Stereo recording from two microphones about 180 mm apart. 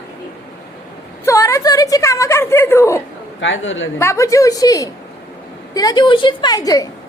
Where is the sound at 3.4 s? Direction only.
90° left.